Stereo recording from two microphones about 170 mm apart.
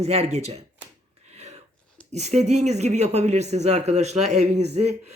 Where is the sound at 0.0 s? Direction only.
40° right (ahead or behind).